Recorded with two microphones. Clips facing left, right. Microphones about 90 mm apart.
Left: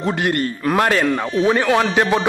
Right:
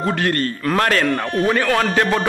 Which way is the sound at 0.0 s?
15° left (ahead or behind).